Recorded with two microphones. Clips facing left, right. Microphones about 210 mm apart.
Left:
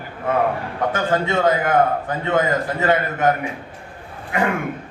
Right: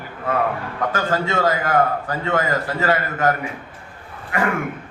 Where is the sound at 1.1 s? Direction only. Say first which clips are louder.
Left 3 dB; 20° left (ahead or behind).